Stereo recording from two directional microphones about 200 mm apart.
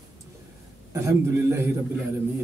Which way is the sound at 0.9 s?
15° right (ahead or behind).